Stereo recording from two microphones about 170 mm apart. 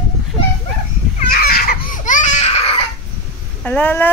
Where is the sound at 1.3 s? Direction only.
60° left (ahead or behind); by 2.5 s 45° left (ahead or behind).